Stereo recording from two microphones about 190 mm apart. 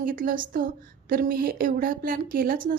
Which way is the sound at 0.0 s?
45° right (ahead or behind).